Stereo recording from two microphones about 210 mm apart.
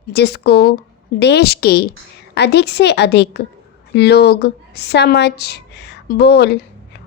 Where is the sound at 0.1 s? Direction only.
50° left (ahead or behind).